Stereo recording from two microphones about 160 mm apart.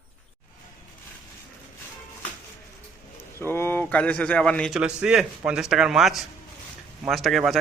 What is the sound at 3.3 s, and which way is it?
A man's voice, 15° left (ahead or behind).